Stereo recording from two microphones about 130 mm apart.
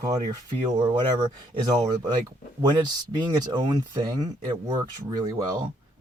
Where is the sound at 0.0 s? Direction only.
25° right (ahead or behind).